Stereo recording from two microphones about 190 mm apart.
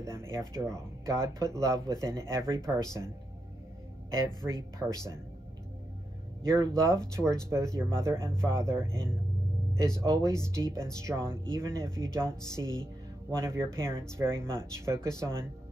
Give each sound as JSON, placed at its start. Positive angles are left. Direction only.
{"t": 0.1, "sound": "speech", "side_deg": -15}
{"t": 4.3, "sound": "speech", "side_deg": 20}
{"t": 4.7, "sound": "speech", "side_deg": -15}
{"t": 6.4, "sound": "speech", "side_deg": -15}